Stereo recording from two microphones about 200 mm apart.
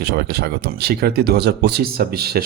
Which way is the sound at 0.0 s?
55° right (ahead or behind).